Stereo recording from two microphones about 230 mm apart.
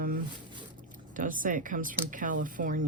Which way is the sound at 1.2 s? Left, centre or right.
Right.